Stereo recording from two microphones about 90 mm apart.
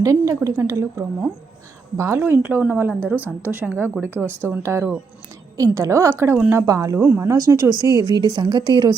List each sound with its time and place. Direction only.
0.0 s a woman's voice: 35° right (ahead or behind)
5.5 s a woman's voice: 40° right (ahead or behind)
7.0 s speech: 20° right (ahead or behind)
7.3 s a woman's voice: 40° right (ahead or behind)
7.7 s a woman's voice: 45° left (ahead or behind)
8.0 s a woman's voice: 50° right (ahead or behind)